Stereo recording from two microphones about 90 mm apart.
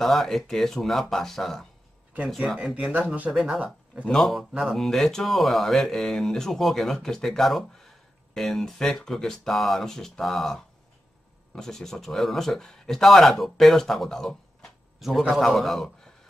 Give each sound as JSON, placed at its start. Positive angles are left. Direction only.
{"t": 0.0, "sound": "speech", "side_deg": 0}
{"t": 2.6, "sound": "speech", "side_deg": -10}
{"t": 3.3, "sound": "speech", "side_deg": -5}
{"t": 4.0, "sound": "speech", "side_deg": 5}